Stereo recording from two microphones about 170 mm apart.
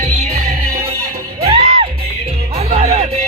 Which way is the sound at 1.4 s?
35° right (ahead or behind).